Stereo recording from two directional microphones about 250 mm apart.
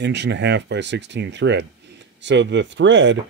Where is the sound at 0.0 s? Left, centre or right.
Right.